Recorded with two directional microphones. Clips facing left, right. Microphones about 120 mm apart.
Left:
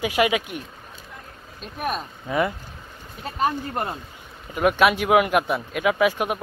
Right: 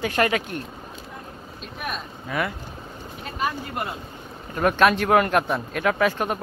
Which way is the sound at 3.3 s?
35° left (ahead or behind).